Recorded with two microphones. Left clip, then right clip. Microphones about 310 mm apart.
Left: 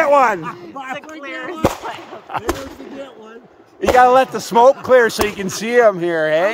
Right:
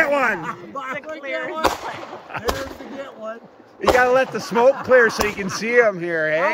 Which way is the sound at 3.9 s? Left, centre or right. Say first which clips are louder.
Left 6 dB; centre.